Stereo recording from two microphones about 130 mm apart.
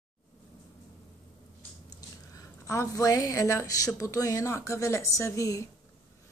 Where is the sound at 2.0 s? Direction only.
25° left (ahead or behind).